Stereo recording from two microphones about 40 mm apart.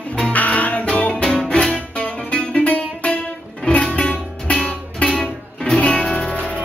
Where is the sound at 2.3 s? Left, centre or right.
Left.